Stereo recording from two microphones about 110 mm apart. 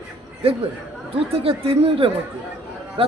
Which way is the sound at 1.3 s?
60° right (ahead or behind).